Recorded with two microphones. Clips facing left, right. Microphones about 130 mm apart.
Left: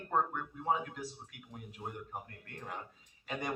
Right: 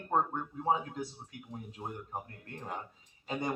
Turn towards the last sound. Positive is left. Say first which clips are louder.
# right 4 dB
turn(degrees=-25)  # may be behind; listen again after turning